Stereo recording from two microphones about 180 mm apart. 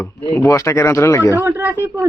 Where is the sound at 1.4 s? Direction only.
10° right (ahead or behind).